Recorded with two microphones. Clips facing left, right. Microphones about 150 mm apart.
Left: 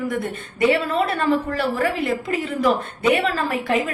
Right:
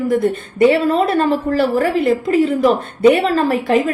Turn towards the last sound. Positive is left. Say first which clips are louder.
# right 7 dB
turn(degrees=-35)  # may be behind; listen again after turning